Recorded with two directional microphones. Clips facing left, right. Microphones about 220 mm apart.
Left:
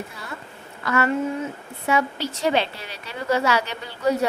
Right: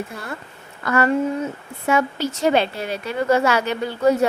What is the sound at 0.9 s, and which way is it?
A woman's voice, 40° right (ahead or behind).